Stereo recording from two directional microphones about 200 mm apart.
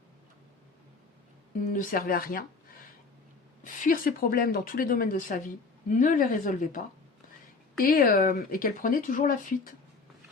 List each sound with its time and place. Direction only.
1.7 s speech: 40° left (ahead or behind)
3.6 s speech: 45° left (ahead or behind)